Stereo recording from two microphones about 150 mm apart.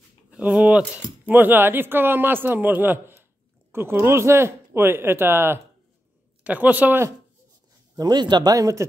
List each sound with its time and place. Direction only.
0.3 s speech: 10° right (ahead or behind)
8.0 s speech: 30° right (ahead or behind)